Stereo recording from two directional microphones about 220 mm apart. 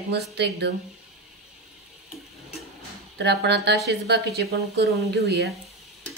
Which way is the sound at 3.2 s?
50° right (ahead or behind).